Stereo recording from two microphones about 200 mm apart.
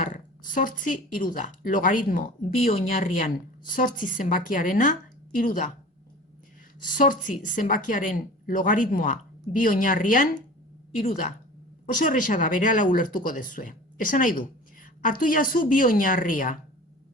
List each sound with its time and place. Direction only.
0.0 s speech: 40° left (ahead or behind)
2.6 s a woman's voice: 30° left (ahead or behind)
6.9 s a woman's voice: 40° left (ahead or behind)